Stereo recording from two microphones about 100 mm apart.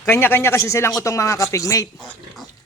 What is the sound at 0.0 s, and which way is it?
A man's voice, 20° left (ahead or behind).